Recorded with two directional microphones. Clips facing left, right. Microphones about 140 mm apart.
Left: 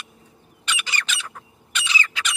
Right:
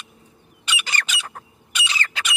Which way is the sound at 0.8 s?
50° right (ahead or behind).